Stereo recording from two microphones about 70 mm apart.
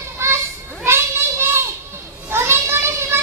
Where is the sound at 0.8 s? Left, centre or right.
Right.